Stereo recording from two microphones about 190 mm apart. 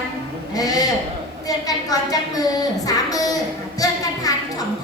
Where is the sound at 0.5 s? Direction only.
20° left (ahead or behind).